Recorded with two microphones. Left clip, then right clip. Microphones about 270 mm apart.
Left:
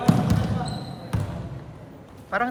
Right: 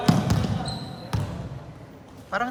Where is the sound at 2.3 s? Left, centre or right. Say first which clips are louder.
Left 2 dB; centre.